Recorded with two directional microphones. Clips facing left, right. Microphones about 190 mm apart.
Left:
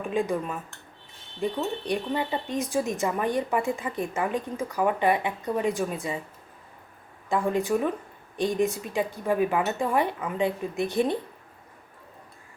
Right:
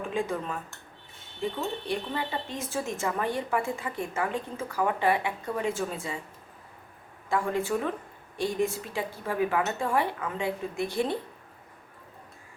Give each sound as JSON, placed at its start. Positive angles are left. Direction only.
{"t": 0.1, "sound": "speech", "side_deg": 15}
{"t": 7.3, "sound": "speech", "side_deg": 20}